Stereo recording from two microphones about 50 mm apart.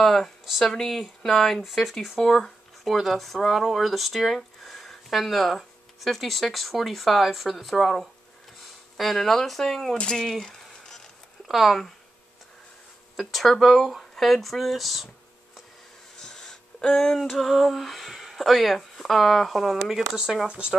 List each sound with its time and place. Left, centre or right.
0.0 s speech: centre
9.9 s speech: centre
10.2 s a sound: centre
11.4 s speech: centre
13.1 s speech: centre
16.2 s a sound: centre
20.4 s speech: right